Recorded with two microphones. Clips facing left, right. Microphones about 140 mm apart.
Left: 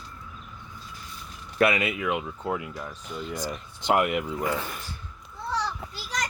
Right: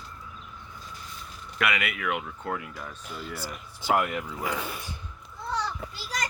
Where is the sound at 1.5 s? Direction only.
30° left (ahead or behind).